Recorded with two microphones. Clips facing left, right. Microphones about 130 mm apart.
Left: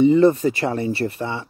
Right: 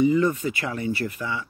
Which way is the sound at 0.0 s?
30° left (ahead or behind).